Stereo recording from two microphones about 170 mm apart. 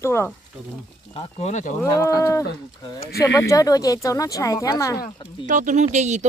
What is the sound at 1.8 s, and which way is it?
Speech, 20° left (ahead or behind).